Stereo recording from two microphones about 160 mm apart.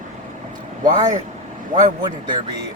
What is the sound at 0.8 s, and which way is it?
Speech, 55° right (ahead or behind).